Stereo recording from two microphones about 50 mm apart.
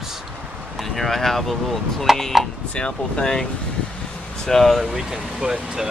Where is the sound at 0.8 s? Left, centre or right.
Centre.